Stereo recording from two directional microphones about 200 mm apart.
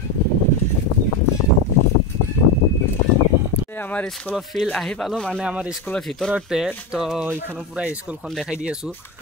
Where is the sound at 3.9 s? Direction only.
5° left (ahead or behind).